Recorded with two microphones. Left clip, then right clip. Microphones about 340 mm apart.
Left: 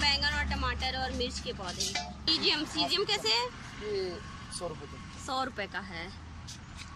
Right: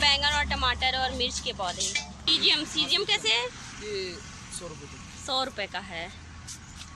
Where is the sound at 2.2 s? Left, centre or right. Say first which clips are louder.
Right 5 dB; centre.